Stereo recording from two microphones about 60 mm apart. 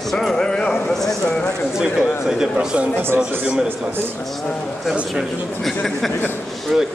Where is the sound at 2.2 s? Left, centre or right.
Centre.